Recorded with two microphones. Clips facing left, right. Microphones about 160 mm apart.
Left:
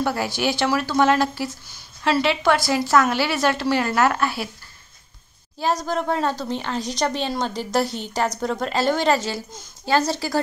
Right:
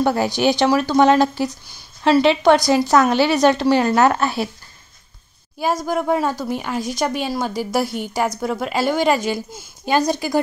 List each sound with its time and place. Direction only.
0.0 s speech: 20° right (ahead or behind)
5.9 s speech: 10° right (ahead or behind)